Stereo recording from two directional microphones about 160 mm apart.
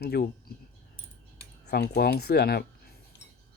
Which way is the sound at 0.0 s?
85° left.